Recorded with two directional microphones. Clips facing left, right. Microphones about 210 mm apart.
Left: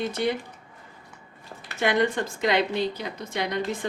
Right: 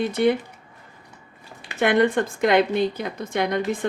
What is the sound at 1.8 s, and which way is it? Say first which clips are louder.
A woman's voice: right 5 dB; 55° right (ahead or behind).